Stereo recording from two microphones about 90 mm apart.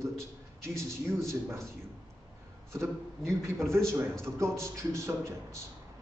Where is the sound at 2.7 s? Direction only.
30° right (ahead or behind).